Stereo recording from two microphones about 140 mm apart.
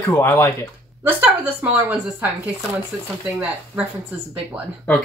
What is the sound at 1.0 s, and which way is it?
Speech, 10° right (ahead or behind).